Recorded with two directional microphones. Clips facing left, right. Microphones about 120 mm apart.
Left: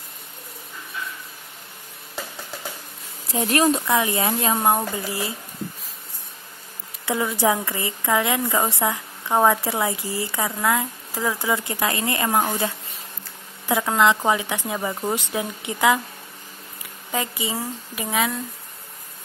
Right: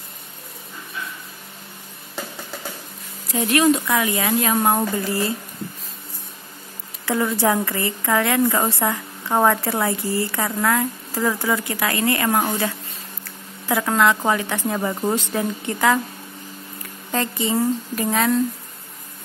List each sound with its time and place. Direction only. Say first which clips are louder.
3.3 s speech: right 2 dB; 35° left (ahead or behind)
4.6 s a woman's voice: right 2 dB; 15° left (ahead or behind)
7.1 s a woman's voice: right 2 dB; 10° left (ahead or behind)
15.3 s a woman's voice: right 3 dB; 15° left (ahead or behind)
17.1 s a woman's voice: right 5 dB; 10° left (ahead or behind)